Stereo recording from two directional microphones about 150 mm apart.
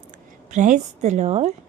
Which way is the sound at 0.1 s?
55° right (ahead or behind).